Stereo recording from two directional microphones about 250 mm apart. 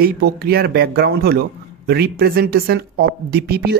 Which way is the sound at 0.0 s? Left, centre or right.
Right.